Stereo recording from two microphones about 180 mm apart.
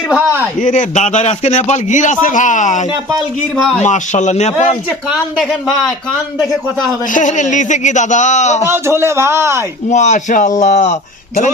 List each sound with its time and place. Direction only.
0.6 s a man's voice: 45° left (ahead or behind)
5.1 s speech: centre (ahead or behind)
7.1 s a man's voice: 45° left (ahead or behind)
8.6 s speech: 15° right (ahead or behind)
9.9 s speech: 40° left (ahead or behind)